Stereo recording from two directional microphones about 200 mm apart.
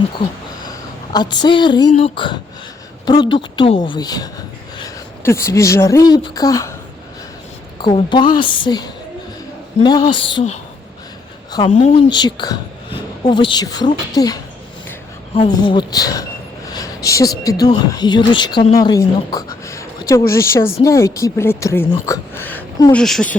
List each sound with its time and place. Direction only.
1.1 s speech: 20° left (ahead or behind)
7.8 s speech: 25° left (ahead or behind)
11.7 s speech: 35° left (ahead or behind); by 14.4 s 20° left (ahead or behind)
15.5 s a woman's voice: 25° left (ahead or behind); by 23.3 s 5° left (ahead or behind)